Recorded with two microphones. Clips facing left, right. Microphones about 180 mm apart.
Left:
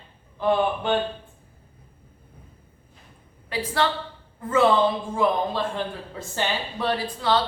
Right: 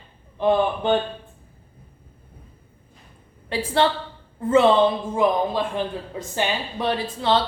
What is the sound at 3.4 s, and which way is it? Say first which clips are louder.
Speech: right 4 dB; 30° right (ahead or behind).